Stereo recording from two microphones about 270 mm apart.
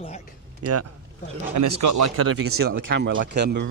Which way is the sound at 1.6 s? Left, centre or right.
Right.